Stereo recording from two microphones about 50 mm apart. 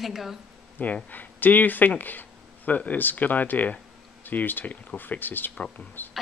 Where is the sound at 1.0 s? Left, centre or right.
Left.